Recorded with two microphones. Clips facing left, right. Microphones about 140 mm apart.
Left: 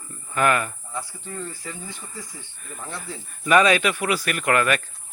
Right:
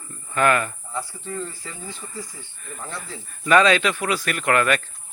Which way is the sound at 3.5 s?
15° left (ahead or behind).